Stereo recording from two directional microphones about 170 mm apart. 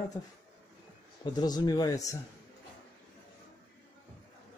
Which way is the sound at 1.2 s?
25° left (ahead or behind).